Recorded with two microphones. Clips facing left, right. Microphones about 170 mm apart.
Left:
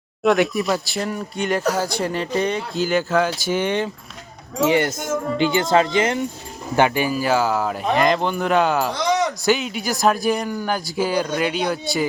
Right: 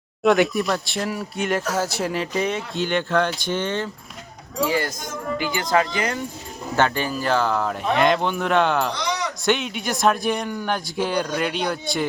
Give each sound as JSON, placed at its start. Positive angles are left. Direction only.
{"t": 0.2, "sound": "speech", "side_deg": 0}
{"t": 6.7, "sound": "speech", "side_deg": 10}